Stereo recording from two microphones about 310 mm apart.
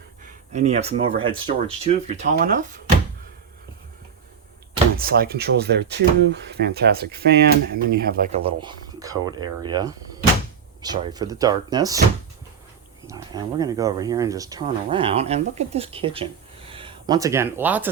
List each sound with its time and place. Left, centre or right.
0.5 s speech: right
4.9 s speech: right; by 11.9 s centre
13.1 s speech: centre